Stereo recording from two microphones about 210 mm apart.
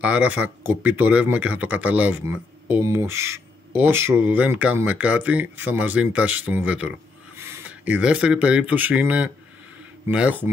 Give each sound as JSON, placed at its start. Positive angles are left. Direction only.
{"t": 0.0, "sound": "speech", "side_deg": -5}